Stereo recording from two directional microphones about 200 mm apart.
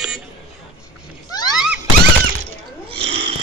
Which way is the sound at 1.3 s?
20° left (ahead or behind).